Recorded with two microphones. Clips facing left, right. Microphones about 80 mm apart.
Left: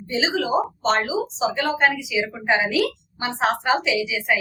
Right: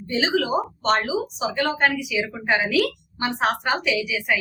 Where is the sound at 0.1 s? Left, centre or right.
Left.